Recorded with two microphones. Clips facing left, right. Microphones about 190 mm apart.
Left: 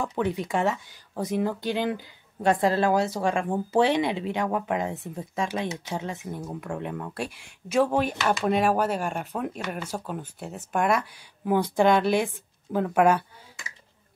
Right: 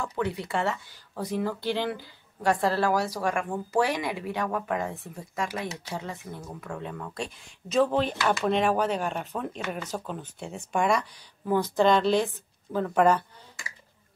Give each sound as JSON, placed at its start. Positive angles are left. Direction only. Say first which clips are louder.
{"t": 0.0, "sound": "speech", "louder": "left 3 dB", "side_deg": 20}